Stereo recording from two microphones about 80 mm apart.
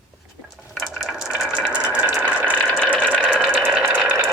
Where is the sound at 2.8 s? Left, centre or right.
Centre.